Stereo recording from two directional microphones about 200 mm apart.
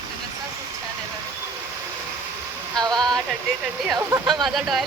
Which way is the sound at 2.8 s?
20° right (ahead or behind).